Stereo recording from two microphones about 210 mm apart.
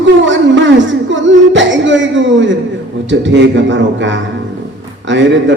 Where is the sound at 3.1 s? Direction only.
60° right (ahead or behind).